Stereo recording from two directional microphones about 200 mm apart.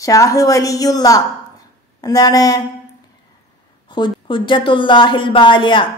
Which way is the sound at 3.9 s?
25° left (ahead or behind).